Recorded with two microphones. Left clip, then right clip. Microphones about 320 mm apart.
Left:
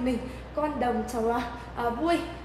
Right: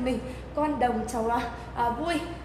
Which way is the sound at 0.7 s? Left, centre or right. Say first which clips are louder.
Right 1 dB; right.